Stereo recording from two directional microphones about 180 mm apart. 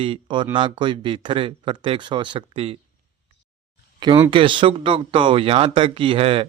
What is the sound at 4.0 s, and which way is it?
Speech, 25° right (ahead or behind).